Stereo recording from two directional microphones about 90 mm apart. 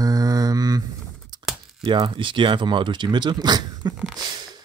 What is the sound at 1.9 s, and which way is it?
Speech, 65° right (ahead or behind).